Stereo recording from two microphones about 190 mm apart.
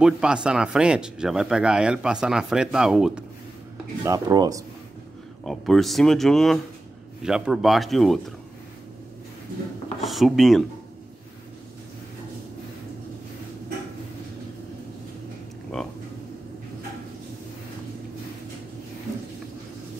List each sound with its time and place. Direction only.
0.0 s speech: 5° right (ahead or behind)
4.0 s speech: 20° right (ahead or behind)
5.4 s speech: centre (ahead or behind)
10.0 s speech: centre (ahead or behind)
15.7 s a sound: centre (ahead or behind)